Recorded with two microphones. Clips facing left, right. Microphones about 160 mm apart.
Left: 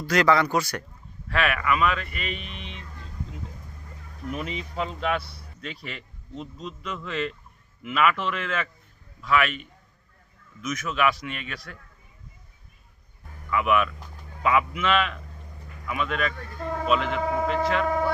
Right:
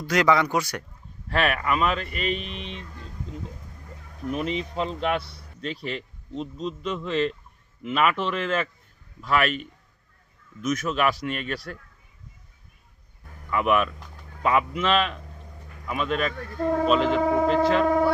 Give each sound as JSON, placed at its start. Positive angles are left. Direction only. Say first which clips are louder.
{"t": 0.1, "sound": "speech", "louder": "even", "side_deg": -15}
{"t": 1.3, "sound": "a man's voice", "louder": "right 1 dB", "side_deg": -30}
{"t": 2.5, "sound": "speech", "louder": "right 4 dB", "side_deg": 5}
{"t": 4.4, "sound": "a man's voice", "louder": "right 4 dB", "side_deg": -25}
{"t": 10.6, "sound": "a man's voice", "louder": "right 2 dB", "side_deg": -35}
{"t": 13.5, "sound": "a man's voice", "louder": "right 1 dB", "side_deg": -35}